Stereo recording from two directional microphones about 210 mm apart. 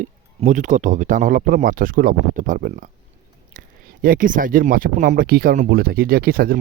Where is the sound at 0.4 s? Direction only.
35° right (ahead or behind).